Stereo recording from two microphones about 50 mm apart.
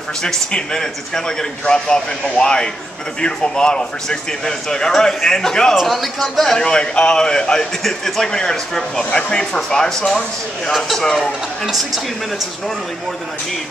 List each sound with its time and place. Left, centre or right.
0.2 s a man's voice: centre
5.8 s speech: centre
6.6 s a man's voice: centre